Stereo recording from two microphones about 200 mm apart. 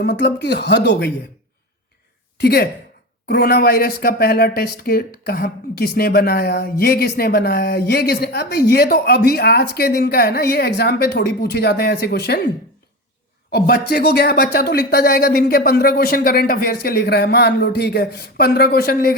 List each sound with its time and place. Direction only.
0.0 s speech: 60° left (ahead or behind)
2.4 s speech: 50° left (ahead or behind)
13.5 s speech: 50° left (ahead or behind)